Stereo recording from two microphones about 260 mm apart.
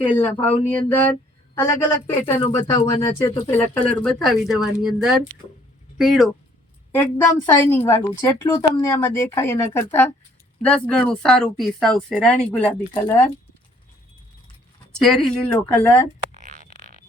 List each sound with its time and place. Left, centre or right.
0.0 s a woman's voice: centre
0.7 s a woman's voice: centre
15.0 s speech: centre
16.3 s a sound: right